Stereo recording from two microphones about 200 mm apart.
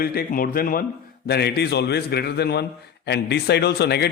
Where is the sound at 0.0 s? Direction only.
50° left (ahead or behind).